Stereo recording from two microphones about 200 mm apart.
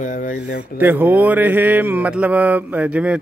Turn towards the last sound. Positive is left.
turn(degrees=-5)  # may be behind; listen again after turning